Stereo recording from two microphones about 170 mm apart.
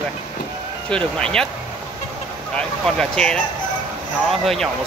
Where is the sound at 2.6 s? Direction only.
5° left (ahead or behind).